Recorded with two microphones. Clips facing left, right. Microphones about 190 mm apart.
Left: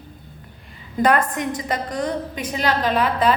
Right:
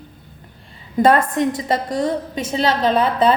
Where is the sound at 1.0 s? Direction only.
25° right (ahead or behind).